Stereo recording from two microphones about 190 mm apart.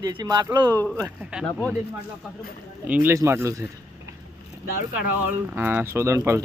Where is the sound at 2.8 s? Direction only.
10° right (ahead or behind).